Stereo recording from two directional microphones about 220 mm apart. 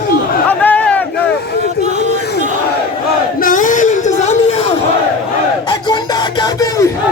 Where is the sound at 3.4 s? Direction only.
35° left (ahead or behind).